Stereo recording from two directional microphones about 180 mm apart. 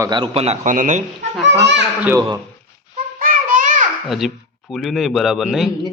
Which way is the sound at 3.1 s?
50° right (ahead or behind).